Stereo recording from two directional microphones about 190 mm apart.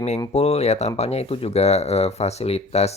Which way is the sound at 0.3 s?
35° left (ahead or behind).